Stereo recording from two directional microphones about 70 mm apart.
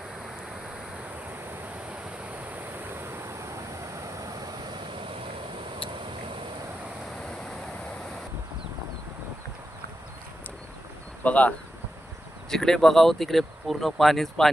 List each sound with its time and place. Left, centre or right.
1.9 s a sound: right
4.0 s vehicle: right
11.2 s speech: centre
12.5 s speech: centre